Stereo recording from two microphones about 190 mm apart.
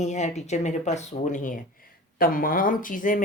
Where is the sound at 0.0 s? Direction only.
35° left (ahead or behind).